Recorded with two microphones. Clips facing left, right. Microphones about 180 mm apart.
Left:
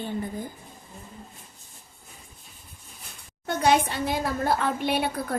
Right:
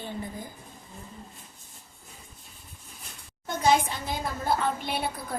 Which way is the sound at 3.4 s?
65° left (ahead or behind).